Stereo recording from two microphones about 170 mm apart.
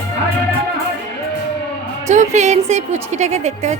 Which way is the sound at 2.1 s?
45° right (ahead or behind).